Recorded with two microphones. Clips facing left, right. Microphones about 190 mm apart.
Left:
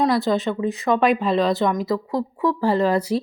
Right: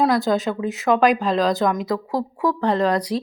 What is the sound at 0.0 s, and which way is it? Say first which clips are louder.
Speech: right 1 dB; centre (ahead or behind).